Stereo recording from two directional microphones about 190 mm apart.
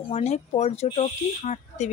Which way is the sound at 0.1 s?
35° left (ahead or behind).